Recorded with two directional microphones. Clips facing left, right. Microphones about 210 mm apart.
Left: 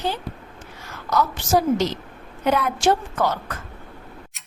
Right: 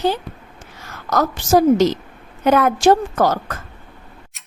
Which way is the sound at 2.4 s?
45° right (ahead or behind).